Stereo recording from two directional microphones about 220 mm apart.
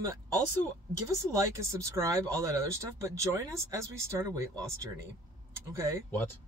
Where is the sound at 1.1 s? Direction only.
15° right (ahead or behind).